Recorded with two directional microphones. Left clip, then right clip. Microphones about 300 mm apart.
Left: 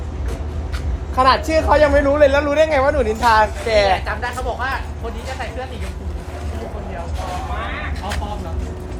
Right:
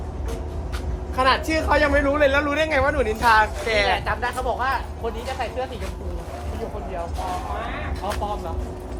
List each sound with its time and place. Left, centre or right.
1.1 s a man's voice: centre
4.0 s speech: right